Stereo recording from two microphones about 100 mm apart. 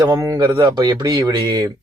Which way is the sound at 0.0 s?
40° right (ahead or behind).